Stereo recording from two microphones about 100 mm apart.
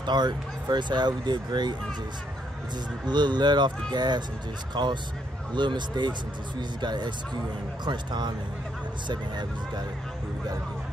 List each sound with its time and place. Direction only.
0.0 s speech: 50° right (ahead or behind)
3.1 s speech: 45° right (ahead or behind)